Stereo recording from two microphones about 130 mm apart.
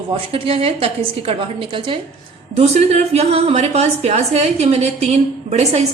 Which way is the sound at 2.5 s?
55° right (ahead or behind).